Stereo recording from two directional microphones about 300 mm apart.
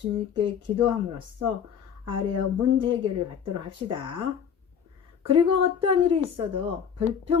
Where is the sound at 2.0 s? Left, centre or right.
Centre.